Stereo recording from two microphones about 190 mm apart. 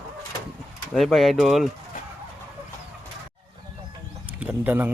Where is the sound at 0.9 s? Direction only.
Centre (ahead or behind).